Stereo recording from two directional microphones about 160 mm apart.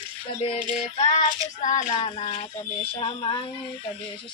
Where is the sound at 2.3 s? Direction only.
35° left (ahead or behind).